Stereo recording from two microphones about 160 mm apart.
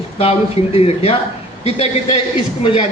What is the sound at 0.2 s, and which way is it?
A man's voice, 40° left (ahead or behind).